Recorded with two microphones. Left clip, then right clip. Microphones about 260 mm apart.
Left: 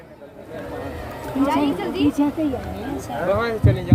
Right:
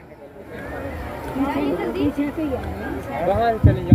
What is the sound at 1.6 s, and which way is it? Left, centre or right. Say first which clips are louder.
Speech: left 1 dB; left.